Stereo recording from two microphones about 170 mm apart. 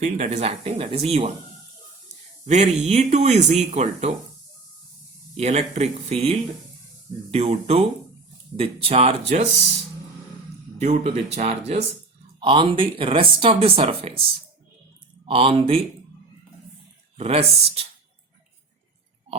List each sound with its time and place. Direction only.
0.0 s speech: 45° right (ahead or behind)
2.4 s speech: 45° right (ahead or behind)
5.4 s speech: 40° right (ahead or behind)
10.8 s speech: 40° right (ahead or behind)
15.3 s speech: 35° right (ahead or behind)
17.2 s speech: 35° right (ahead or behind)